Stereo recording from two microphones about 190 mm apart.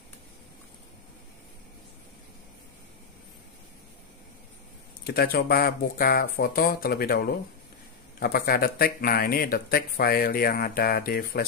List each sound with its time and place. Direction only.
5.0 s speech: 55° left (ahead or behind)